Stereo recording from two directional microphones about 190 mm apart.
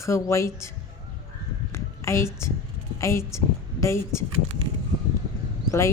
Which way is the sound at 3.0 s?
15° left (ahead or behind).